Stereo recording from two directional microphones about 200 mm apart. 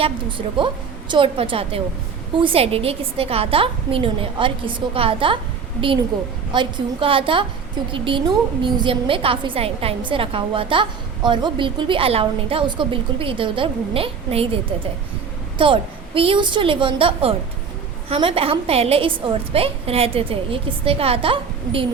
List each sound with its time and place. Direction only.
0.0 s a woman's voice: 25° right (ahead or behind)
6.5 s a woman's voice: 25° right (ahead or behind)
15.5 s a woman's voice: 25° right (ahead or behind)